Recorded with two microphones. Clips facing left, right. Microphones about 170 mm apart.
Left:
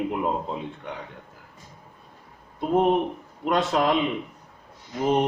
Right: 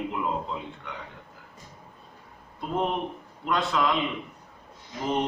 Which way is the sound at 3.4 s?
45° left (ahead or behind).